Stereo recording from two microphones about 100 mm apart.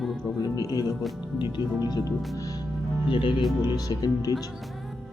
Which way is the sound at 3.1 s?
60° left (ahead or behind).